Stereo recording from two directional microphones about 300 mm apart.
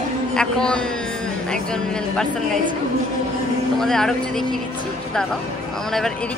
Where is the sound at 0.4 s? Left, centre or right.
Centre.